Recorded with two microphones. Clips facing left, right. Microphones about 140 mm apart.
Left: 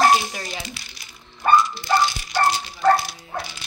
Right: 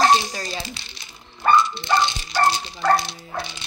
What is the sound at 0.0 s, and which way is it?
Dog, 25° right (ahead or behind).